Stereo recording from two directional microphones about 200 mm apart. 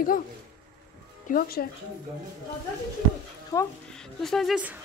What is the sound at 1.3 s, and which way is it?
Speech, 50° left (ahead or behind).